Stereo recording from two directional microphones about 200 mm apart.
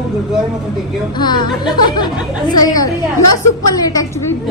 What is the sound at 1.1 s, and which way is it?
A woman's voice, 20° left (ahead or behind).